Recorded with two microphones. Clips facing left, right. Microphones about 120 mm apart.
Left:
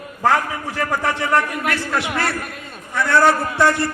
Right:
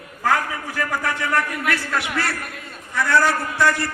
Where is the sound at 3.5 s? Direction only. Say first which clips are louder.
Left 3 dB; 25° left (ahead or behind).